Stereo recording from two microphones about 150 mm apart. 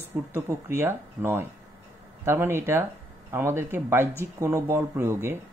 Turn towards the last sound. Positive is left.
turn(degrees=-15)  # may be behind; listen again after turning